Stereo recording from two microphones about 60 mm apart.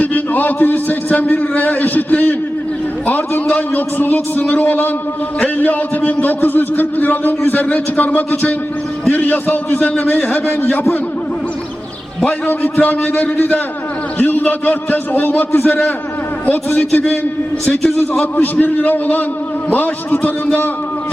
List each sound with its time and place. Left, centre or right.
0.0 s a man's voice: left
12.5 s a man's voice: left
16.7 s a man's voice: left